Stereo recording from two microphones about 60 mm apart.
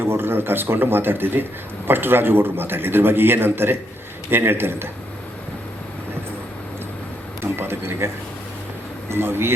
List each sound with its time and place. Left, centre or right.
0.0 s a man's voice: right
7.5 s a man's voice: right